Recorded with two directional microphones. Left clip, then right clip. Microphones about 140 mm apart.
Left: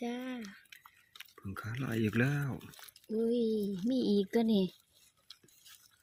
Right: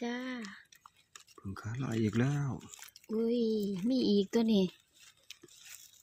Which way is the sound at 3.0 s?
40° right (ahead or behind).